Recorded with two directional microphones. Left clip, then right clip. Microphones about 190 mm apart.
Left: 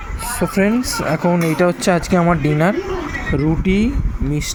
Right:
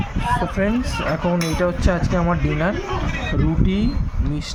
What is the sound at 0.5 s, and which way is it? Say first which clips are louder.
Speech: left 4 dB; 20° left (ahead or behind).